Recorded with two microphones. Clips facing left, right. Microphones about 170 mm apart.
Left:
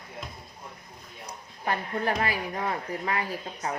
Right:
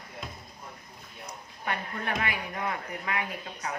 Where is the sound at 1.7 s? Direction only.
35° left (ahead or behind).